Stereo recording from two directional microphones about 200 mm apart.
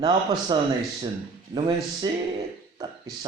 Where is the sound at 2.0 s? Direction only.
20° right (ahead or behind).